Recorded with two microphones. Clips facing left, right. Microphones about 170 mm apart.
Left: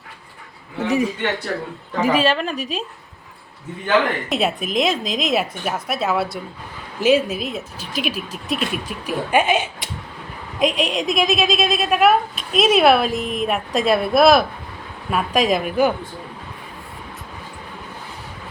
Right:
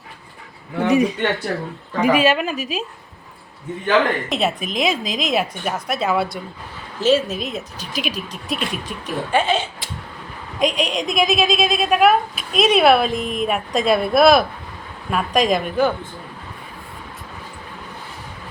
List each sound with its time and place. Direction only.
0.9 s a man's voice: 20° right (ahead or behind); by 2.8 s centre (ahead or behind)
4.3 s a woman's voice: centre (ahead or behind)
10.6 s a woman's voice: centre (ahead or behind)